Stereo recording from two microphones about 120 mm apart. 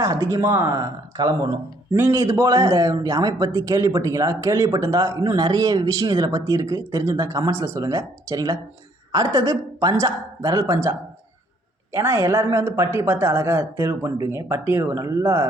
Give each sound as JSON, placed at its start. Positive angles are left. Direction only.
{"t": 0.0, "sound": "speech", "side_deg": -25}